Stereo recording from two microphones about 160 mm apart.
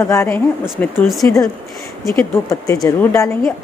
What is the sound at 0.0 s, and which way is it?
Speech, 15° left (ahead or behind).